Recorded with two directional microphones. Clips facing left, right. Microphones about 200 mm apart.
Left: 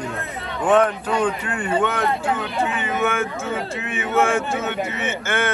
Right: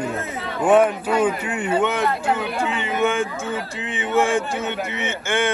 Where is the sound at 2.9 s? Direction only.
15° right (ahead or behind).